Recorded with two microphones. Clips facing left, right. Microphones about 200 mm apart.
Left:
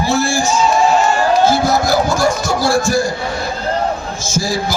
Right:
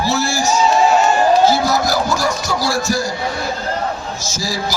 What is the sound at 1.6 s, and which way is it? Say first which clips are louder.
A man's voice: left 3 dB; 50° left (ahead or behind).